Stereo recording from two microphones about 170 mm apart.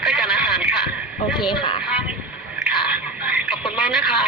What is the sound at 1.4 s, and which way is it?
Speech, 30° left (ahead or behind).